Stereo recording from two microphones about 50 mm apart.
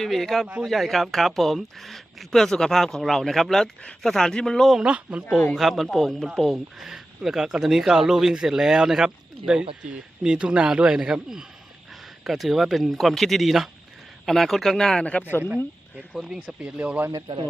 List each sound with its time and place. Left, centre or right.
0.0 s speech: centre
4.8 s speech: right
5.5 s speech: centre
16.2 s speech: centre